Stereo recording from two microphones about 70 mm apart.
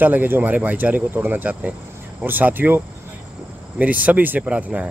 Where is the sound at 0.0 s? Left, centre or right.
Right.